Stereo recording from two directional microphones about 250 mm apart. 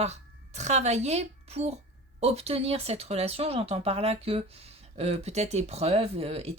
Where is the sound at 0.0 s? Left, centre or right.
Right.